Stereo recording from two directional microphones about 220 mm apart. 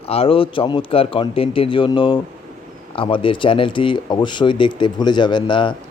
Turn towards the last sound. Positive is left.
turn(degrees=20)  # may be behind; listen again after turning